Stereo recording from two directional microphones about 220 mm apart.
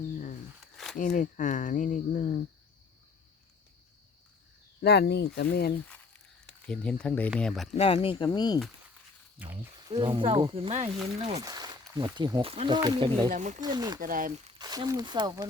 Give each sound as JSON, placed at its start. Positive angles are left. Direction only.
{"t": 0.6, "sound": "a sound", "side_deg": 0}
{"t": 0.9, "sound": "speech", "side_deg": 35}
{"t": 4.8, "sound": "speech", "side_deg": 50}
{"t": 5.9, "sound": "a sound", "side_deg": 5}
{"t": 7.7, "sound": "speech", "side_deg": 25}
{"t": 9.9, "sound": "speech", "side_deg": -20}
{"t": 11.4, "sound": "speech", "side_deg": -15}
{"t": 13.3, "sound": "speech", "side_deg": -35}
{"t": 13.6, "sound": "speech", "side_deg": -20}
{"t": 14.0, "sound": "speech", "side_deg": -40}
{"t": 14.6, "sound": "speech", "side_deg": -20}